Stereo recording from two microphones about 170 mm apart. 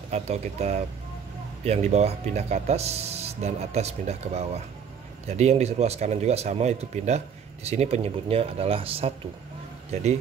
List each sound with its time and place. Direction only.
0.1 s speech: 40° right (ahead or behind)